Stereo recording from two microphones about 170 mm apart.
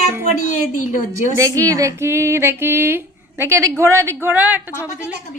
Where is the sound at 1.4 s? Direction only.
20° right (ahead or behind).